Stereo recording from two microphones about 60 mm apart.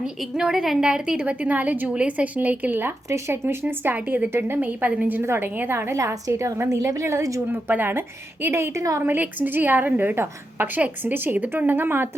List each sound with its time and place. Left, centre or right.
0.3 s a woman's voice: centre; by 2.9 s right
3.1 s speech: right
5.2 s a woman's voice: right
6.4 s a woman's voice: right
7.4 s a woman's voice: right
9.0 s a woman's voice: right
11.1 s speech: right